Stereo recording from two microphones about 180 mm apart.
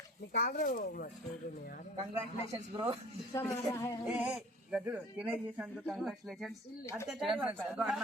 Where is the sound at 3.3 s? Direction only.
15° left (ahead or behind).